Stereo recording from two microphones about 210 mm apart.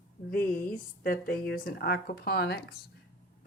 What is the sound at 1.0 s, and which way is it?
Speech, 45° left (ahead or behind).